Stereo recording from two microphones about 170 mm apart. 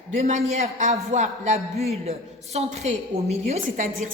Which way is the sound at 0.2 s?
40° right (ahead or behind).